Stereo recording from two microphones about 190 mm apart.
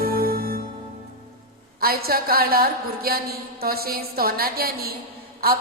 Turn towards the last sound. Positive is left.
turn(degrees=-50)  # may be behind; listen again after turning